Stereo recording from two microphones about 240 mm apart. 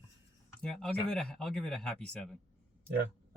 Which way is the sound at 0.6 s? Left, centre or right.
Centre.